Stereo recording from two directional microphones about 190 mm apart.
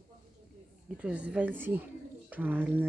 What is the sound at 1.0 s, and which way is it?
A woman's voice, 5° right (ahead or behind).